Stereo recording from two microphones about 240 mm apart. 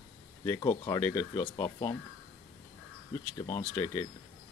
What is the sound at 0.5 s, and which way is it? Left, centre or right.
Speech, centre.